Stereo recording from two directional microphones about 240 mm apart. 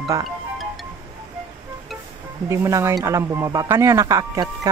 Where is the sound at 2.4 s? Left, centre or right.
Centre.